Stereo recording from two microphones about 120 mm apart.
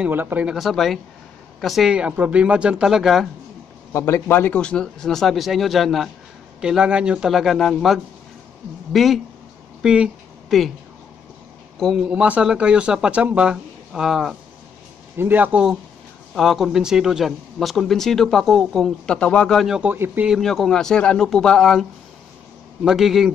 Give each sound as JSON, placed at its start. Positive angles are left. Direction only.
{"t": 0.0, "sound": "speech", "side_deg": -15}
{"t": 0.6, "sound": "speech", "side_deg": 0}
{"t": 3.9, "sound": "speech", "side_deg": 20}
{"t": 12.1, "sound": "speech", "side_deg": -10}
{"t": 15.1, "sound": "speech", "side_deg": -15}
{"t": 16.3, "sound": "speech", "side_deg": 0}
{"t": 19.8, "sound": "speech", "side_deg": -15}
{"t": 20.3, "sound": "speech", "side_deg": 0}
{"t": 22.8, "sound": "speech", "side_deg": 0}